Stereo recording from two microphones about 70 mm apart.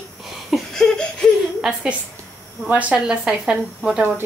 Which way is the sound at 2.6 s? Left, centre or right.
Right.